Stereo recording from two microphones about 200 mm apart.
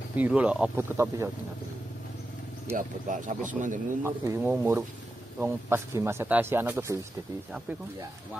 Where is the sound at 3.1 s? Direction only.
40° right (ahead or behind).